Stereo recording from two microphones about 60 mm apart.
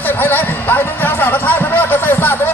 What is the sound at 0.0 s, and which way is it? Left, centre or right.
Music, left.